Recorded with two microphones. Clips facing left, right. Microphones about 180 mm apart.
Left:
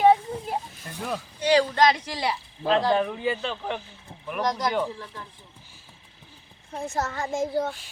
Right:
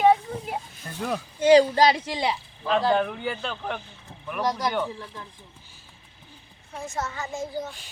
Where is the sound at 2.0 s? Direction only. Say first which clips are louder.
Right 2 dB; 25° right (ahead or behind).